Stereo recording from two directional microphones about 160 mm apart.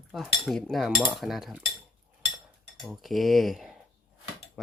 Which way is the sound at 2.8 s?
Centre (ahead or behind).